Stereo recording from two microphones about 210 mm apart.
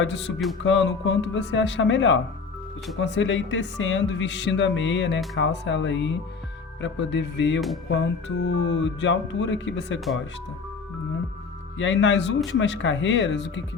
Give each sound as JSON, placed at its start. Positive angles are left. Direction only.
{"t": 0.0, "sound": "speech", "side_deg": 55}
{"t": 11.8, "sound": "speech", "side_deg": 60}